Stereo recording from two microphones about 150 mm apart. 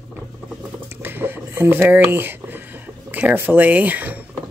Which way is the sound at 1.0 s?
15° right (ahead or behind).